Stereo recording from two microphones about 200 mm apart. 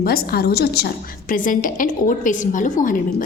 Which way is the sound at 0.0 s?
50° left (ahead or behind).